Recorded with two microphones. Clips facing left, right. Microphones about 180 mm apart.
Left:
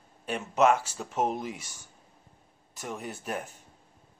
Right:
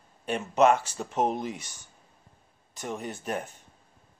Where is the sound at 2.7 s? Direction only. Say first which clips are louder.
Right 2 dB; 5° left (ahead or behind).